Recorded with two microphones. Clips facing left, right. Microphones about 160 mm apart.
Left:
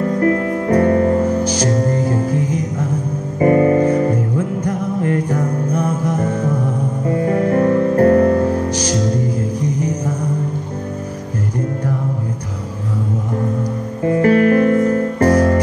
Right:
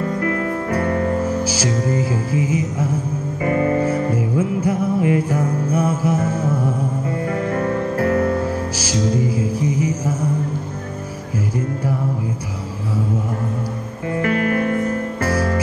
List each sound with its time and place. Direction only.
0.0 s music: 35° left (ahead or behind)
1.4 s music: 5° right (ahead or behind)
3.3 s music: 35° left (ahead or behind)
3.8 s music: 5° right (ahead or behind)
7.2 s music: 40° left (ahead or behind)
8.7 s music: 5° right (ahead or behind)
14.2 s music: 40° left (ahead or behind)